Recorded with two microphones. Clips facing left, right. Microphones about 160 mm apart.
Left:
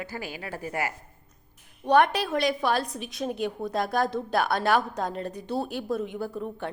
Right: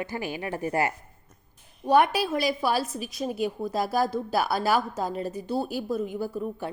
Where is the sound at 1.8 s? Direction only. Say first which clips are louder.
Even; 5° right (ahead or behind).